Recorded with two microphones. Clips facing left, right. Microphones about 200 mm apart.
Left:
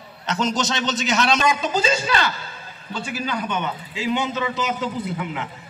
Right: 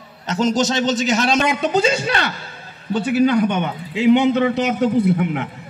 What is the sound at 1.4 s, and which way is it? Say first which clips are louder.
A man's voice: right 4 dB; 65° right (ahead or behind).